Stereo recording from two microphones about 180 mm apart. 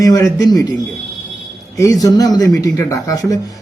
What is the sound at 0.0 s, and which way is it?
Speech, 20° left (ahead or behind).